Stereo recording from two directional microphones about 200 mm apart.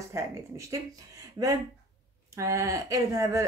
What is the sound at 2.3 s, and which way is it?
Speech, 15° right (ahead or behind).